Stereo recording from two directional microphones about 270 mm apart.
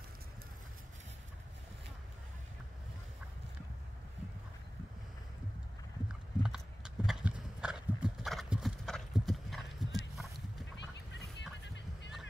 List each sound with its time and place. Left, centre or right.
6.0 s horse: centre
7.1 s clip-clop: centre
10.8 s a sound: left